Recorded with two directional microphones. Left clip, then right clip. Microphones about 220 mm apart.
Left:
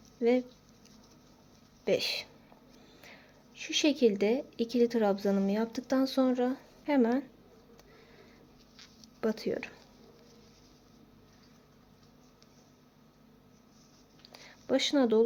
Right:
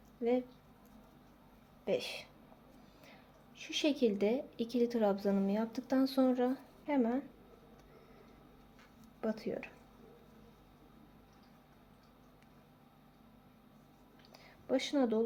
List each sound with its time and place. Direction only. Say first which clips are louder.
0.2 s speech: left 6 dB; 45° left (ahead or behind)
1.8 s a woman's voice: left 6 dB; 45° left (ahead or behind); by 6.6 s 25° left (ahead or behind)
6.8 s speech: left 6 dB; 40° left (ahead or behind)
9.2 s speech: left 6 dB; 45° left (ahead or behind)
14.3 s a sound: left 5 dB; 40° left (ahead or behind)